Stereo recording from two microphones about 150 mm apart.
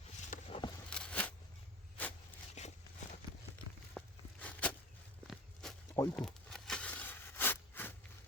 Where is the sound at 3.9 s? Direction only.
10° left (ahead or behind).